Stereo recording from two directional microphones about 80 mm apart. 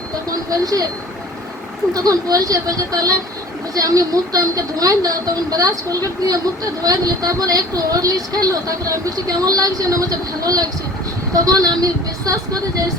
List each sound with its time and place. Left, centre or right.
0.5 s speech: right
1.9 s speech: right
6.8 s speech: right